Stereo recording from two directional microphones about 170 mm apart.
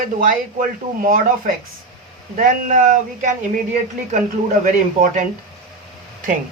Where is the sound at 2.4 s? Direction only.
50° right (ahead or behind).